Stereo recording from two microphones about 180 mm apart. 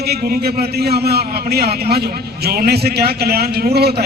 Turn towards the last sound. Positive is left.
turn(degrees=-60)  # may be behind; listen again after turning